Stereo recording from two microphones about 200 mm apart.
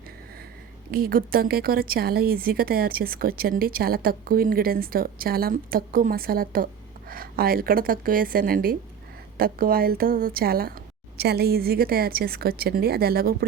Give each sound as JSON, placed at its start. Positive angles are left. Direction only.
{"t": 0.9, "sound": "a woman's voice", "side_deg": -45}